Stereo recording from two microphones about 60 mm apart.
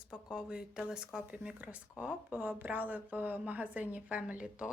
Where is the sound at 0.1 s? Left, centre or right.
Centre.